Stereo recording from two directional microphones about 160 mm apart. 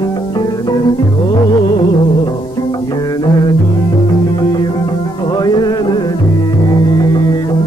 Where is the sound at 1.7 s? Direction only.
25° left (ahead or behind).